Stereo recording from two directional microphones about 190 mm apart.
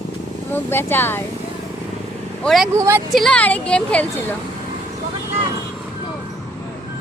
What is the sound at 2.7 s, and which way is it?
Speech, 15° right (ahead or behind).